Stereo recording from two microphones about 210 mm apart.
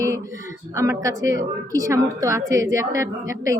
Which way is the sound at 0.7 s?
15° right (ahead or behind).